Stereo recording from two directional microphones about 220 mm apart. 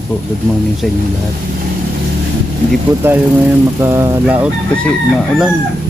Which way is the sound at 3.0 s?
10° right (ahead or behind).